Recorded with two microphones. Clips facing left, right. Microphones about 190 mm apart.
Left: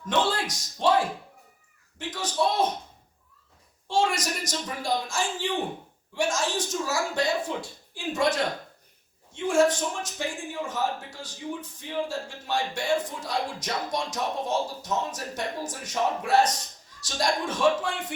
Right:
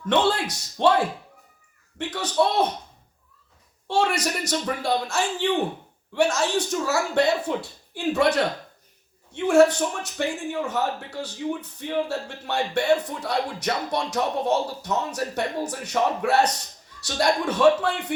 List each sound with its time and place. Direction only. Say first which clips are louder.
0.0 s a man's voice: right 4 dB; 65° right (ahead or behind)
2.0 s speech: right 5 dB; 65° right (ahead or behind)
3.8 s a man's voice: right 2 dB; 65° right (ahead or behind)
9.3 s a man's voice: right 5 dB; 65° right (ahead or behind)